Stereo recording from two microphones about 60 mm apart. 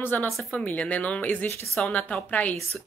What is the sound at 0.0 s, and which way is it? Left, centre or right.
Speech, left.